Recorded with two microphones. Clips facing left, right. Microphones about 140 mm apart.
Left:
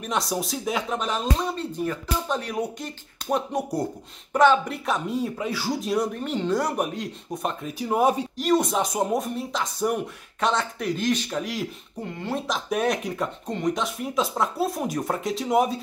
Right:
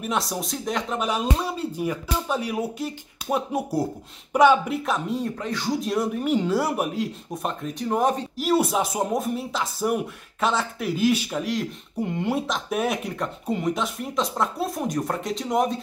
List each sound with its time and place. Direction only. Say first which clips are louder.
0.0 s speech: even; centre (ahead or behind)
0.9 s speech: right 1 dB; 10° right (ahead or behind)
4.8 s speech: even; centre (ahead or behind)
8.4 s speech: right 3 dB; 5° right (ahead or behind)
12.0 s speech: right 5 dB; 15° right (ahead or behind)
12.4 s speech: left 1 dB; centre (ahead or behind)